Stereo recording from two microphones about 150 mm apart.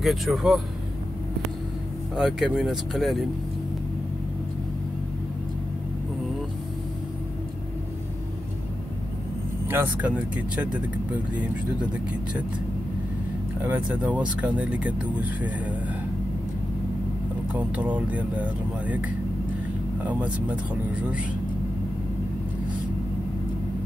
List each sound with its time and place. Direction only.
0.0 s speech: centre (ahead or behind)
2.1 s speech: 5° right (ahead or behind)
9.7 s speech: 10° right (ahead or behind)
13.6 s speech: 10° right (ahead or behind)
17.5 s speech: 10° right (ahead or behind)